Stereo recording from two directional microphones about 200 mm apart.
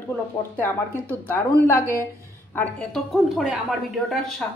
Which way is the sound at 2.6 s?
5° left (ahead or behind).